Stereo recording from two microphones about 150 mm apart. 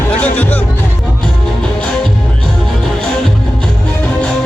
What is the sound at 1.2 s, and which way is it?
Music, centre (ahead or behind).